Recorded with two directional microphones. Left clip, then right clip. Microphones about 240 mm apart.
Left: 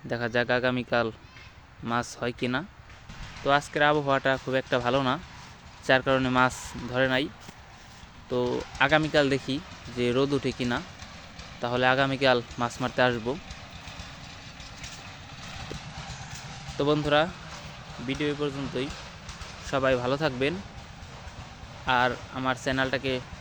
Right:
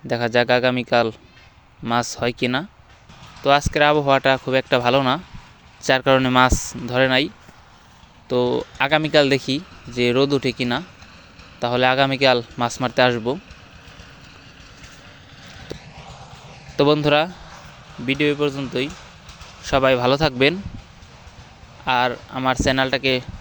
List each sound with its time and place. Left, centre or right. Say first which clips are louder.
0.1 s speech: right 8 dB; right
8.3 s speech: right 8 dB; right
16.7 s speech: right 7 dB; right
21.8 s speech: right 5 dB; right